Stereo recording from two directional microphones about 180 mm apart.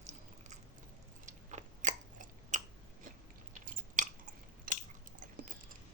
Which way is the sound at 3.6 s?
45° right (ahead or behind).